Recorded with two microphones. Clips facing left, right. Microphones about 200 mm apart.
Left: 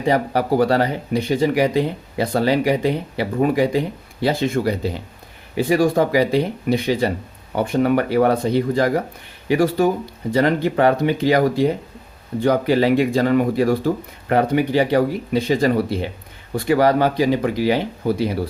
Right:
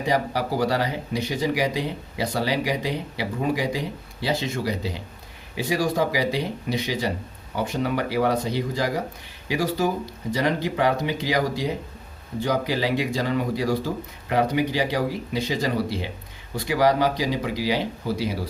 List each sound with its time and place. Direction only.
0.1 s speech: 55° left (ahead or behind)